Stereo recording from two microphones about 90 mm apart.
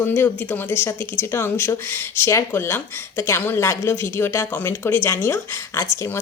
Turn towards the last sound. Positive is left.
turn(degrees=30)  # may be behind; listen again after turning